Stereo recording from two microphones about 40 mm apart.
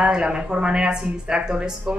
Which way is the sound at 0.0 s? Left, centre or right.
Right.